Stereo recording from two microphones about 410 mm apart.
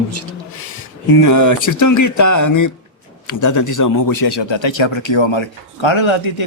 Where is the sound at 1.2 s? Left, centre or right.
Left.